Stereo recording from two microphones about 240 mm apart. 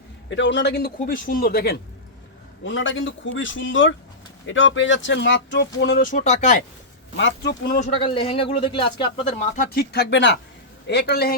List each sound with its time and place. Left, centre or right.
0.3 s a man's voice: left
2.6 s speech: left
7.2 s speech: left
7.8 s speech: left
9.6 s a man's voice: left